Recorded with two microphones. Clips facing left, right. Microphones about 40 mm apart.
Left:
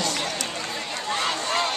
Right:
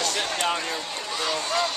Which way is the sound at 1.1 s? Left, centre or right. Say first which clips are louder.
Left 1 dB; left.